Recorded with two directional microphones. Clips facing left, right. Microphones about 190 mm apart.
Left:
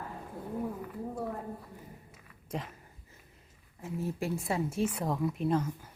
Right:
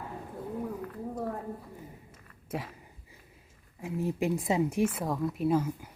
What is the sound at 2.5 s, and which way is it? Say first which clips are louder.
Speech: right 2 dB; 5° right (ahead or behind).